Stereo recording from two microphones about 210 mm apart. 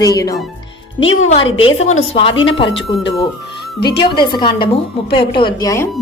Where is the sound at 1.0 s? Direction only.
65° left (ahead or behind).